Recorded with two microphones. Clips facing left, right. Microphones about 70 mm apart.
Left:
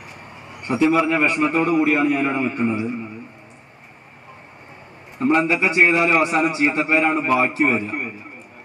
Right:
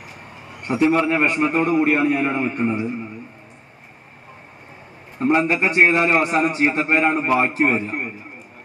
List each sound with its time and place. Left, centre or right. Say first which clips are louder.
0.5 s a sound: even; centre
1.0 s a man's voice: even; centre
5.2 s a man's voice: even; centre